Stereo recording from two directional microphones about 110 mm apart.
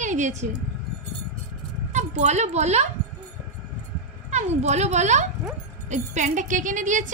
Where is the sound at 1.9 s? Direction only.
90° right.